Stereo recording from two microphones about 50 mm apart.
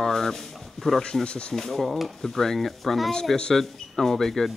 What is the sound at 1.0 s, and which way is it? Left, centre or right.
Speech, centre.